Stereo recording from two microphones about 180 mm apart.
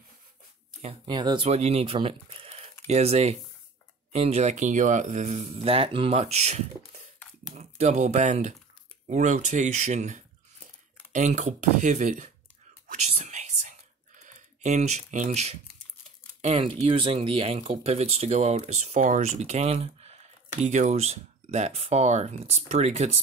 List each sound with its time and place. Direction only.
0.8 s speech: 25° right (ahead or behind); by 12.3 s 45° right (ahead or behind)
12.8 s whispering: 40° right (ahead or behind)
14.2 s speech: 40° right (ahead or behind)